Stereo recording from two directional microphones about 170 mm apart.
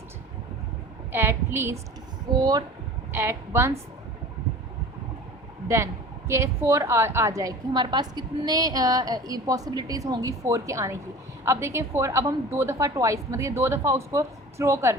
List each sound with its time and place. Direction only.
1.1 s a woman's voice: 15° right (ahead or behind)
5.6 s a woman's voice: 15° right (ahead or behind)